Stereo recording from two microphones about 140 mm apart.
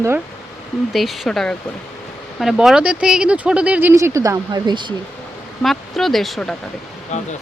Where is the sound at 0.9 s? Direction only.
Centre (ahead or behind).